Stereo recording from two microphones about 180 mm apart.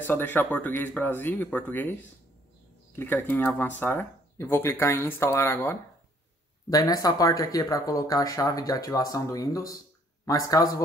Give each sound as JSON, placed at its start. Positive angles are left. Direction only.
{"t": 0.0, "sound": "speech", "side_deg": 10}
{"t": 3.0, "sound": "speech", "side_deg": 10}